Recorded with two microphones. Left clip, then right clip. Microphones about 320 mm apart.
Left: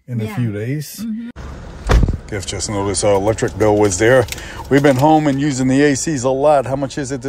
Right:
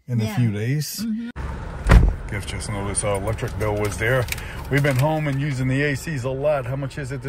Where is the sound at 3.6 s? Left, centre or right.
Left.